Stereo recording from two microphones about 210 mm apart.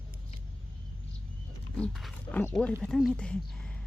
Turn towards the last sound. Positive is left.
turn(degrees=5)  # may be behind; listen again after turning